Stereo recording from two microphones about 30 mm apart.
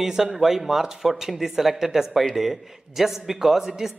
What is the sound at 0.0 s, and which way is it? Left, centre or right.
Speech, centre.